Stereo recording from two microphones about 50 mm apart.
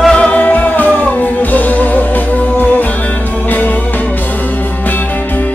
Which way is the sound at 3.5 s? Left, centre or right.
Left.